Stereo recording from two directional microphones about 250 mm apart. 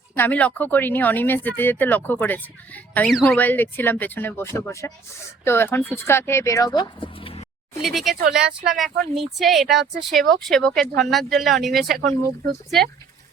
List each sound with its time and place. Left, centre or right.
0.2 s speech: centre; by 7.4 s left
7.8 s speech: centre
11.9 s speech: right